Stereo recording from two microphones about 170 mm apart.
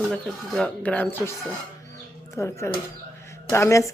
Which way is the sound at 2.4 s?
15° left (ahead or behind).